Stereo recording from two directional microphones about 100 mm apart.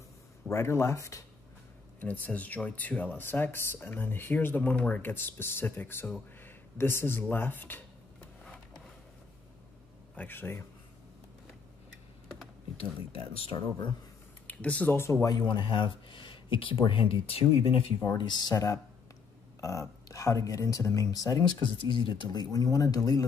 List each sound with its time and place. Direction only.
0.5 s speech: 25° left (ahead or behind)
2.0 s speech: 15° left (ahead or behind)
6.4 s a sound: 20° left (ahead or behind)
10.1 s speech: 20° left (ahead or behind)
12.7 s speech: 75° left (ahead or behind)
14.5 s speech: 15° left (ahead or behind)
15.2 s speech: 50° left (ahead or behind); by 17.7 s 70° left (ahead or behind)
18.1 s speech: 50° left (ahead or behind)
18.5 s speech: 35° left (ahead or behind)
21.6 s speech: 55° left (ahead or behind); by 23.2 s 35° left (ahead or behind)